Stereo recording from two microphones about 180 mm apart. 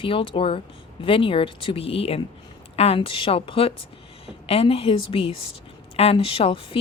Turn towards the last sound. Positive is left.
turn(degrees=30)  # may be behind; listen again after turning